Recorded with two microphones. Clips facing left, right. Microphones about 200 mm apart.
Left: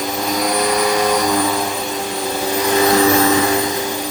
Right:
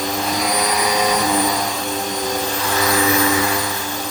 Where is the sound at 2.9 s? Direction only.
40° left (ahead or behind).